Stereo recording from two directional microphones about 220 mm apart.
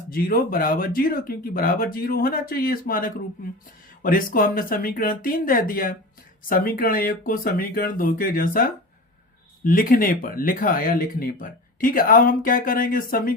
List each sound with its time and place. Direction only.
0.1 s speech: 40° left (ahead or behind)